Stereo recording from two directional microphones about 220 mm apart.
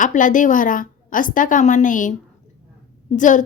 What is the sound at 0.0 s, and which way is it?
A woman's voice, 35° left (ahead or behind).